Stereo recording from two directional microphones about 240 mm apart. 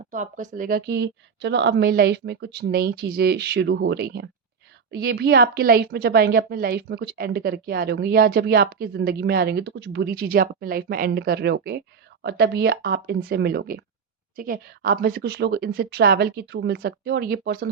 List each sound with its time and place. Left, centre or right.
0.1 s a woman's voice: right